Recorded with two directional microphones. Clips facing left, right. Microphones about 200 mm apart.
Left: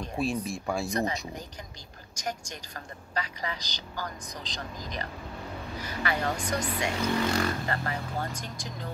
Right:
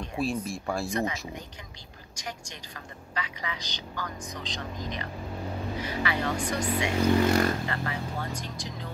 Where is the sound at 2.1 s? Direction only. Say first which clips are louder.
Left 4 dB; 45° left (ahead or behind).